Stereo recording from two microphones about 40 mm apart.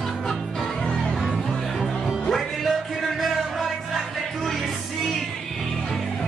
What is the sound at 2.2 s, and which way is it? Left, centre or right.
Music, centre.